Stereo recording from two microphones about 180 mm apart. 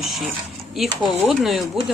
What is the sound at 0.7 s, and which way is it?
Speech, centre (ahead or behind).